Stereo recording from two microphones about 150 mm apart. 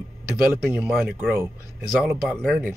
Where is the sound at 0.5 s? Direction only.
5° right (ahead or behind).